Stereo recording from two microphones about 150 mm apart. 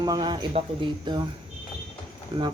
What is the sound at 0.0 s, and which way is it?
Speech, 30° right (ahead or behind).